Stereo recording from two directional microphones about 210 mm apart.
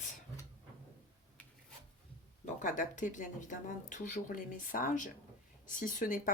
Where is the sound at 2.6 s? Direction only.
35° left (ahead or behind).